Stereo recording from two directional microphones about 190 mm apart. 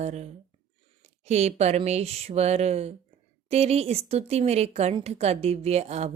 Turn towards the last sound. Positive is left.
turn(degrees=-35)  # may be behind; listen again after turning